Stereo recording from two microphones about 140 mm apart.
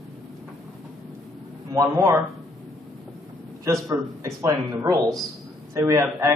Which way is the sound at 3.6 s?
25° right (ahead or behind).